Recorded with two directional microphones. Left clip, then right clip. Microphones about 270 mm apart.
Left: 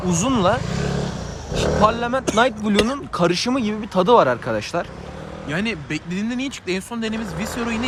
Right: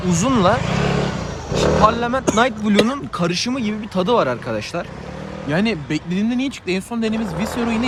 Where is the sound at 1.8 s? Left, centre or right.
Centre.